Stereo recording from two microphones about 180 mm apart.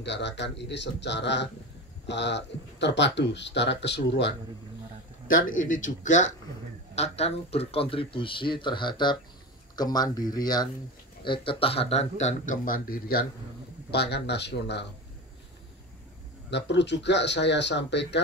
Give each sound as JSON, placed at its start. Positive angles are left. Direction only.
{"t": 0.0, "sound": "speech", "side_deg": 75}
{"t": 5.6, "sound": "speech", "side_deg": 45}
{"t": 13.8, "sound": "speech", "side_deg": 65}
{"t": 16.4, "sound": "speech", "side_deg": 75}